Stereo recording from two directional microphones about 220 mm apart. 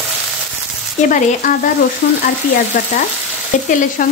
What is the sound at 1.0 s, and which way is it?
Frying, 35° left (ahead or behind).